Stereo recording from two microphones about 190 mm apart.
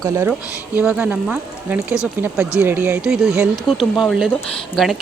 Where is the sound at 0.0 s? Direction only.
15° right (ahead or behind).